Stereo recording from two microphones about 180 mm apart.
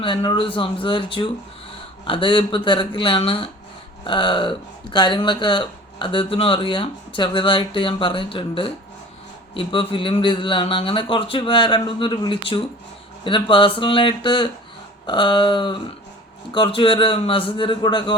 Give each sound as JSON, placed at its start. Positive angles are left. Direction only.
{"t": 0.0, "sound": "speech", "side_deg": 25}